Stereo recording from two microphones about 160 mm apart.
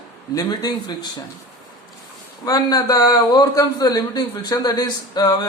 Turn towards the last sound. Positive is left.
turn(degrees=25)  # may be behind; listen again after turning